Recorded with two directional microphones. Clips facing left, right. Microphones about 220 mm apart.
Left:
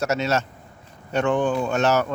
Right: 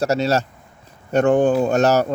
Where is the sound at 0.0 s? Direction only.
35° right (ahead or behind).